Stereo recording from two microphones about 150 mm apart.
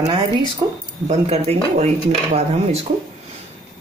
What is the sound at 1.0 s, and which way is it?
Speech, 45° right (ahead or behind).